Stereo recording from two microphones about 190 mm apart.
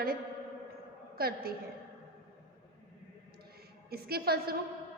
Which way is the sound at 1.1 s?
55° right (ahead or behind).